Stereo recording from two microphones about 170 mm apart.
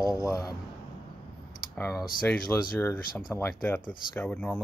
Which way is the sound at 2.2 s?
10° left (ahead or behind).